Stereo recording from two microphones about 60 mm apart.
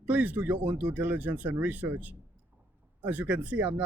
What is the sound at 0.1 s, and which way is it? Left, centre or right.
Speech, right.